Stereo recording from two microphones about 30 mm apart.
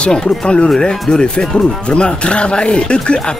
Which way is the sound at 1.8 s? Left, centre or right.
Left.